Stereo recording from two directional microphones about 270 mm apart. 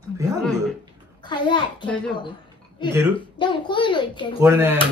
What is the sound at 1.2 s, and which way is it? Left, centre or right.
Speech, centre.